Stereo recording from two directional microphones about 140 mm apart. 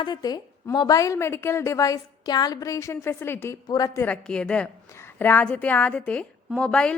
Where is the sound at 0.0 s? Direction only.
30° left (ahead or behind).